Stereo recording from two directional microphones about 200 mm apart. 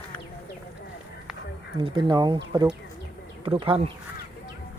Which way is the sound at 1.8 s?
20° right (ahead or behind).